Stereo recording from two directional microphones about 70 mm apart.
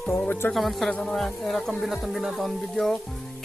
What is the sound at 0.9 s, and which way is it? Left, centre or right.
Speech, centre.